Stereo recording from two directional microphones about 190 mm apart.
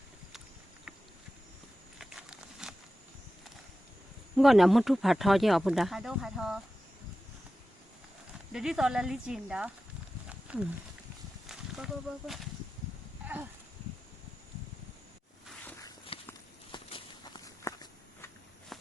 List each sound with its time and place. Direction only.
2.0 s patter: centre (ahead or behind)
4.4 s speech: centre (ahead or behind)
8.5 s speech: centre (ahead or behind)
10.2 s wild animals: 5° right (ahead or behind)
11.4 s speech: centre (ahead or behind)
13.2 s a sound: 10° right (ahead or behind)
16.1 s walk: 30° left (ahead or behind)
18.7 s walk: centre (ahead or behind)